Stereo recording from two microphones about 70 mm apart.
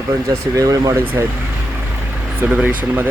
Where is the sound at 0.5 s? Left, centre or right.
Right.